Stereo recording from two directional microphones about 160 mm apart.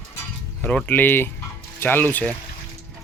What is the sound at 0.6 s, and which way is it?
Speech, 10° left (ahead or behind).